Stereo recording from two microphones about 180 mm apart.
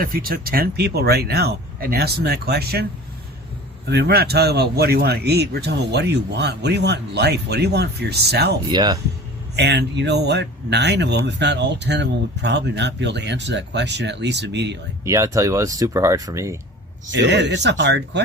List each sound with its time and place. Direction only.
0.0 s a man's voice: 55° right (ahead or behind)
3.8 s a man's voice: 65° right (ahead or behind)
8.7 s speech: 25° right (ahead or behind)
9.6 s speech: 70° right (ahead or behind)
15.0 s speech: 15° right (ahead or behind)
17.1 s speech: 75° right (ahead or behind)